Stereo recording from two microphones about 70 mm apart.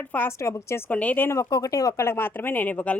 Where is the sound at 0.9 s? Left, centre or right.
Left.